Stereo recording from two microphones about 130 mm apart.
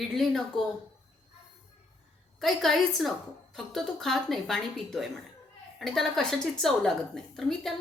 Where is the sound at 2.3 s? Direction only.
Centre (ahead or behind).